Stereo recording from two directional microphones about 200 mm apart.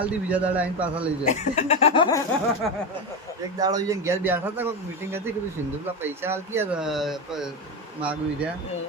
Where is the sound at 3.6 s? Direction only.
20° right (ahead or behind).